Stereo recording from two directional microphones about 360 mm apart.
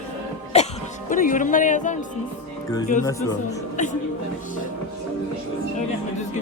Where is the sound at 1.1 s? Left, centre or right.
Left.